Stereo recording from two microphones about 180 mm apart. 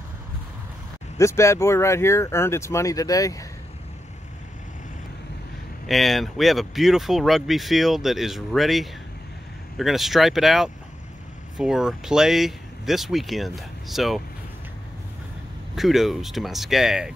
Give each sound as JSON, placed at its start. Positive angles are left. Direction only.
{"t": 1.1, "sound": "speech", "side_deg": 15}
{"t": 5.9, "sound": "speech", "side_deg": 0}
{"t": 15.7, "sound": "speech", "side_deg": 0}